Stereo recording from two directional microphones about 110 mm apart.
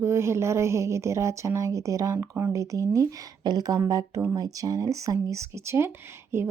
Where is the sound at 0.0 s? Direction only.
25° right (ahead or behind).